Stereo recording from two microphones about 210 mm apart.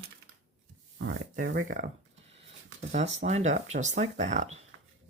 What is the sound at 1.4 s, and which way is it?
Speech, 50° right (ahead or behind).